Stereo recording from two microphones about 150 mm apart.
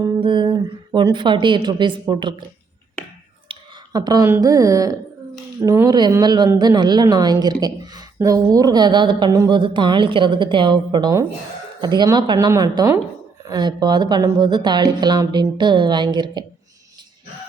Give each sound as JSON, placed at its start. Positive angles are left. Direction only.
{"t": 0.0, "sound": "speech", "side_deg": -30}
{"t": 3.5, "sound": "a woman's voice", "side_deg": -25}